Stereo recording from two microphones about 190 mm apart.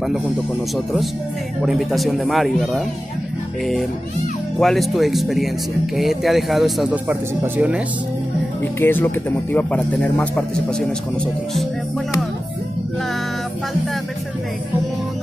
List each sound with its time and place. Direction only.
1.6 s speech: centre (ahead or behind)
4.6 s speech: centre (ahead or behind)
8.7 s speech: 10° left (ahead or behind)